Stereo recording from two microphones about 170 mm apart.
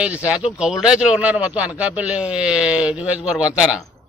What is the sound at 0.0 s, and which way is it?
A man's voice, 5° right (ahead or behind).